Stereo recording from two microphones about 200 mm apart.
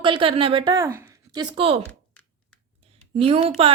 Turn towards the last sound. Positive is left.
turn(degrees=-30)  # may be behind; listen again after turning